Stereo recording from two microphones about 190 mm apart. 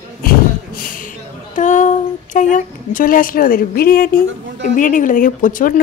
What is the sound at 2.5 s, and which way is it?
A woman's voice, 45° left (ahead or behind).